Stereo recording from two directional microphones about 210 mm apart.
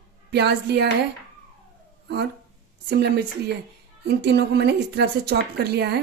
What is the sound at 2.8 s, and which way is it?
Speech, 50° right (ahead or behind).